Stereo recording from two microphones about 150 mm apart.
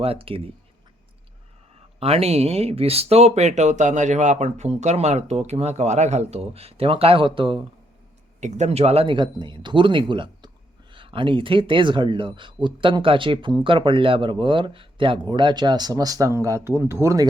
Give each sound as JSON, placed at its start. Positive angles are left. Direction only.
{"t": 0.0, "sound": "a man's voice", "side_deg": -40}
{"t": 2.0, "sound": "speech", "side_deg": -40}
{"t": 8.4, "sound": "a man's voice", "side_deg": -50}